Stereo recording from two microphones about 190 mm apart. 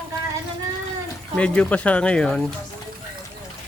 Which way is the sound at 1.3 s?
5° left (ahead or behind).